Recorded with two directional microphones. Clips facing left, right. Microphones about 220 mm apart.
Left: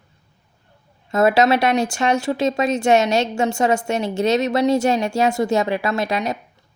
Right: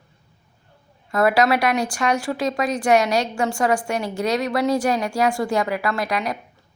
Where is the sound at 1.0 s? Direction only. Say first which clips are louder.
Left 2 dB; 25° left (ahead or behind).